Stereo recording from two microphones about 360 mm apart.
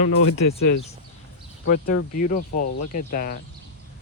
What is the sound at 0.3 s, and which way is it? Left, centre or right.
Speech, left.